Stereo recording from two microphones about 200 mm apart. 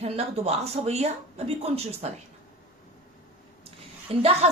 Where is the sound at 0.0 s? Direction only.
30° right (ahead or behind).